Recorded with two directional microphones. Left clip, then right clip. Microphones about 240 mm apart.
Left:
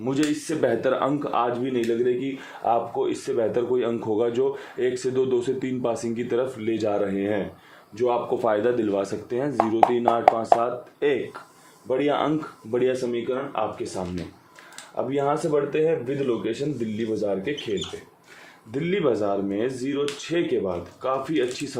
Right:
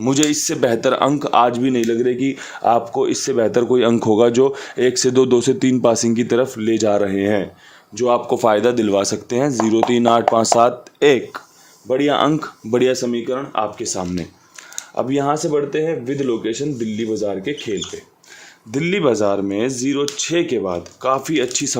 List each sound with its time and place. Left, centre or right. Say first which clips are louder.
0.0 s speech: right 8 dB; right